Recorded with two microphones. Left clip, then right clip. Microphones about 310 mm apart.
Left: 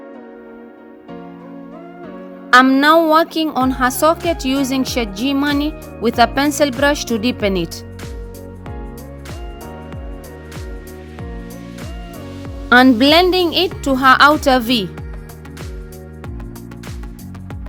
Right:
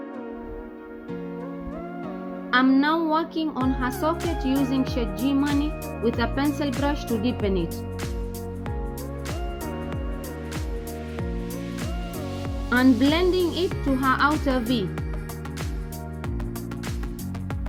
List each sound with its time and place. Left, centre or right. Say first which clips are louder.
2.5 s a woman's voice: left 11 dB; left
12.7 s a woman's voice: left 11 dB; left